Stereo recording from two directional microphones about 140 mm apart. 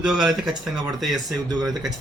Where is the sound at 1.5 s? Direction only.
30° right (ahead or behind).